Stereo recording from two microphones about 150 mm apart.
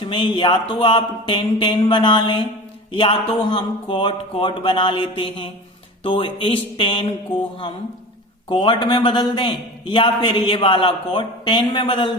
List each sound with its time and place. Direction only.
0.0 s a man's voice: 35° left (ahead or behind)